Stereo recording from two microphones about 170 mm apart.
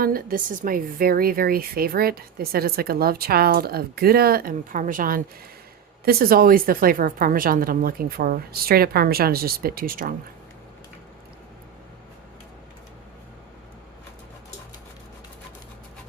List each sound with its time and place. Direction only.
0.0 s a woman's voice: 60° right (ahead or behind)